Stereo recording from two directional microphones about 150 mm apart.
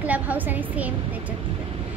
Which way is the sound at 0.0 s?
10° right (ahead or behind).